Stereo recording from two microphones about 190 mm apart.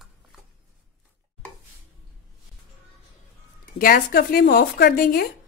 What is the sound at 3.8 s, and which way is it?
Speech, 50° left (ahead or behind).